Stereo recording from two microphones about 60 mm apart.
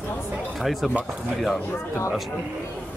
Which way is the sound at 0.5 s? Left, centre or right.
Centre.